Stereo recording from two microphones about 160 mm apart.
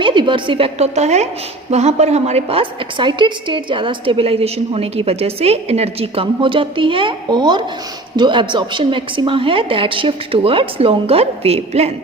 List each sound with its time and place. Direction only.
0.0 s a woman's voice: 30° right (ahead or behind)